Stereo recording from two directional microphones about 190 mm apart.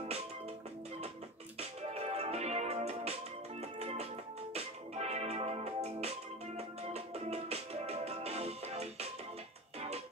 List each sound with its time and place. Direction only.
1.6 s music: 35° right (ahead or behind)